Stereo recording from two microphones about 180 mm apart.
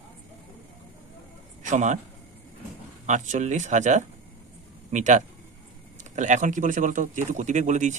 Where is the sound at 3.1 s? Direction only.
40° right (ahead or behind).